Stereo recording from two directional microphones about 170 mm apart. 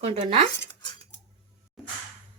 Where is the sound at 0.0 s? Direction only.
35° right (ahead or behind).